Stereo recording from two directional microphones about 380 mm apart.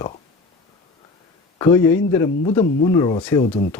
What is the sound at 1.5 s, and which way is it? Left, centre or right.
Speech, centre.